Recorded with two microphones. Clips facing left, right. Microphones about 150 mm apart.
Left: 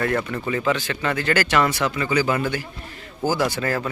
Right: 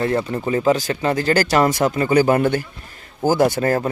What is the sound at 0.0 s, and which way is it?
Speech, 25° right (ahead or behind).